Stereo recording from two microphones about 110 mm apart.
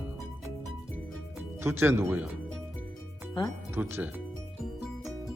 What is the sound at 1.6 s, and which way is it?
Music, 20° right (ahead or behind).